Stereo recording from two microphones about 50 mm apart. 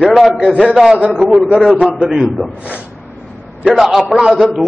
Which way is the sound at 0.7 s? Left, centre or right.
Centre.